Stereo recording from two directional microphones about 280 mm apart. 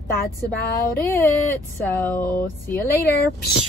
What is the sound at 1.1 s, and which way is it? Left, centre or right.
A woman's voice, centre.